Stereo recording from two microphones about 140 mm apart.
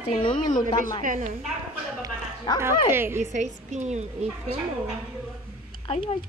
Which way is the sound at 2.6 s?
15° right (ahead or behind).